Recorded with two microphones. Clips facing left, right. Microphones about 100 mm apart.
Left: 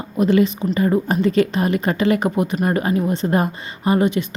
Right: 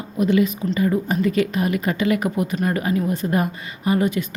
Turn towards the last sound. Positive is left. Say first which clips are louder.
# left 3 dB
turn(degrees=20)  # may be behind; listen again after turning